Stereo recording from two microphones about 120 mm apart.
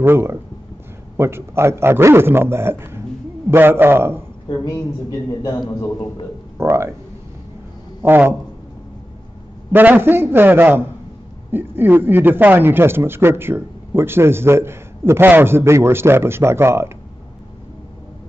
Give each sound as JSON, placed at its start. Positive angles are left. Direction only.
{"t": 0.0, "sound": "speech", "side_deg": -20}
{"t": 4.5, "sound": "a man's voice", "side_deg": 25}
{"t": 6.6, "sound": "speech", "side_deg": -20}
{"t": 8.0, "sound": "a man's voice", "side_deg": -15}
{"t": 9.7, "sound": "a man's voice", "side_deg": -15}